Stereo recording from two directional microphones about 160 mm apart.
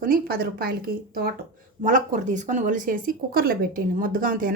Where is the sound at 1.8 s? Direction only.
55° right (ahead or behind).